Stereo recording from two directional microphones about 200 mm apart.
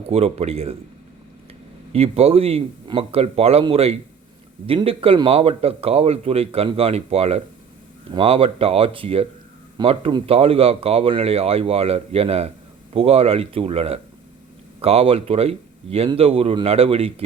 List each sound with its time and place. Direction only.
0.1 s speech: 30° right (ahead or behind)
1.9 s a man's voice: 30° right (ahead or behind)